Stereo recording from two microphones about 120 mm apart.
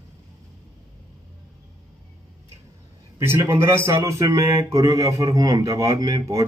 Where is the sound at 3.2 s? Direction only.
20° right (ahead or behind).